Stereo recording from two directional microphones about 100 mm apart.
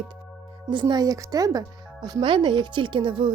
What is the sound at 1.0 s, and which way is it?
A woman's voice, 35° right (ahead or behind).